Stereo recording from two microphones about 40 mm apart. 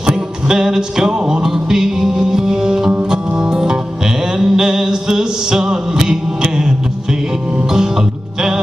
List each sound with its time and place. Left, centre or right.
0.0 s music: centre